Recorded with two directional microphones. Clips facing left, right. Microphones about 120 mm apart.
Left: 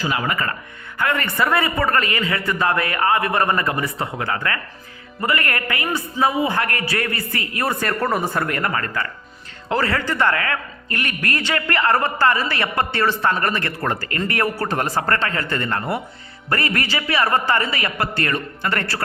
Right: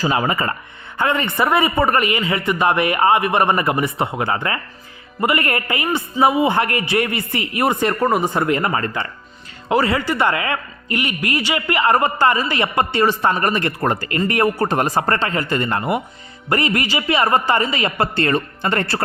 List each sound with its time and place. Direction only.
0.0 s a man's voice: 30° right (ahead or behind)